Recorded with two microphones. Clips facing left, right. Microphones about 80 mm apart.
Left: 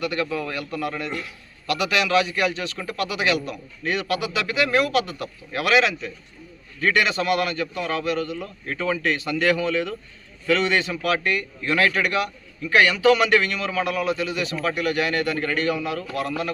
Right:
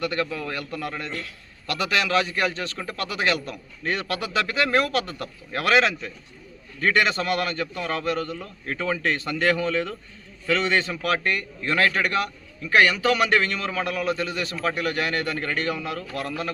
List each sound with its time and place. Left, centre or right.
0.0 s a man's voice: right